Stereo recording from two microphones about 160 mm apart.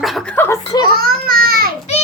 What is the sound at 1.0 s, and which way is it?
Speech, 70° right (ahead or behind).